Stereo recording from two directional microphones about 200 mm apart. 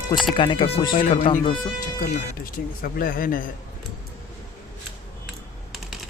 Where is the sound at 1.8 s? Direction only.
45° left (ahead or behind).